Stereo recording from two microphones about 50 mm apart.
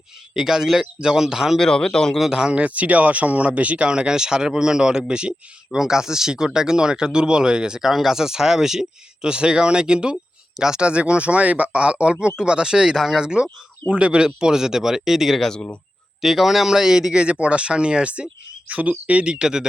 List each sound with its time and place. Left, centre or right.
0.3 s speech: centre
1.5 s speech: centre
2.3 s speech: centre